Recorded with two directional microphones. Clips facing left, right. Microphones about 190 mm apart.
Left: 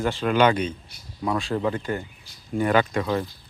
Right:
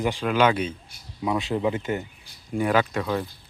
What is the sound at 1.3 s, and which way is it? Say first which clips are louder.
Speech: even; 20° right (ahead or behind).